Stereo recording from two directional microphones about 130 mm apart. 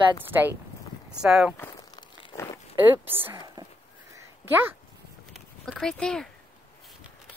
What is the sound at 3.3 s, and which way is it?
Speech, 35° right (ahead or behind).